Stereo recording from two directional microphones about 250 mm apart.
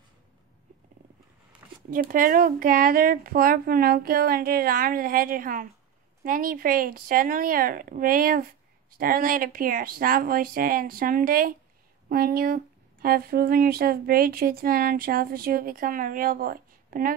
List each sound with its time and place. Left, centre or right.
1.9 s speech: right